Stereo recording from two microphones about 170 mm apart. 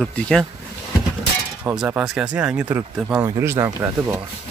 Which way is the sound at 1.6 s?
10° right (ahead or behind).